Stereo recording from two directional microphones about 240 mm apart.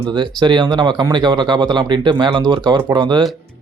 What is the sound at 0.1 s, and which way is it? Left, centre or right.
Speech, centre.